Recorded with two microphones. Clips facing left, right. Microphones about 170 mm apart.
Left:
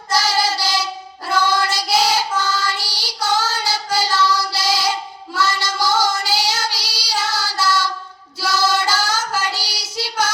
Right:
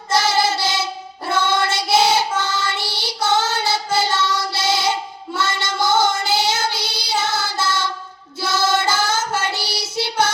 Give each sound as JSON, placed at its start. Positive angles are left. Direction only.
{"t": 0.1, "sound": "child singing", "side_deg": -25}